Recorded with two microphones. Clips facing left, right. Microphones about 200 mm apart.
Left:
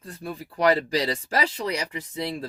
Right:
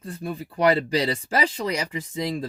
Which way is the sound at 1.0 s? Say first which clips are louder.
Right 2 dB; 15° right (ahead or behind).